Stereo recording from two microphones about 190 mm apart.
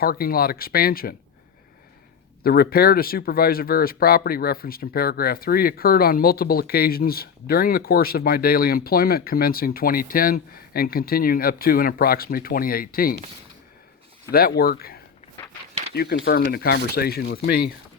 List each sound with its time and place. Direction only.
0.0 s speech: 50° left (ahead or behind)
2.4 s speech: 50° left (ahead or behind)
14.3 s speech: 55° left (ahead or behind)